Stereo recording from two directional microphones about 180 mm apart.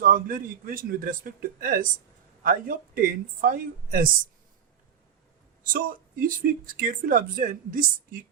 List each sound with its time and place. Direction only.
0.0 s speech: 50° right (ahead or behind)
5.6 s speech: 50° right (ahead or behind)